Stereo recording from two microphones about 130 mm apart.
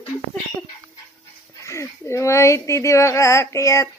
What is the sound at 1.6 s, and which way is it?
Speech, 20° left (ahead or behind).